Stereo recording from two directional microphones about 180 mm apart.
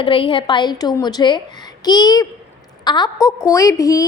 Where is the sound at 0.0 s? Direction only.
30° left (ahead or behind).